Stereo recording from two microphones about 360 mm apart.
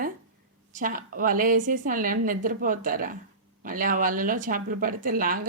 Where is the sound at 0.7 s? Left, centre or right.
Right.